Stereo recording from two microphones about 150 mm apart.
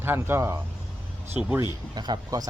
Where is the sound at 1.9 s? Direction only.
30° right (ahead or behind).